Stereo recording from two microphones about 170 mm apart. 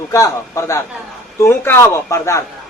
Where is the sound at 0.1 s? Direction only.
15° left (ahead or behind).